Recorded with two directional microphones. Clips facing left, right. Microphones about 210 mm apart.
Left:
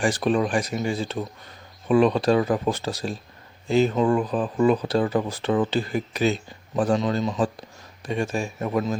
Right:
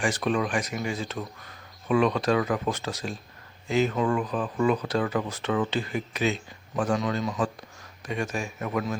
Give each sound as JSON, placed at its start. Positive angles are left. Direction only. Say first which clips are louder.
{"t": 0.0, "sound": "a man's voice", "louder": "left 4 dB", "side_deg": 35}